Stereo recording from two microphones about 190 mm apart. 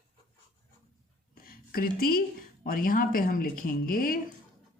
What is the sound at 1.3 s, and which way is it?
A woman's voice, 50° left (ahead or behind).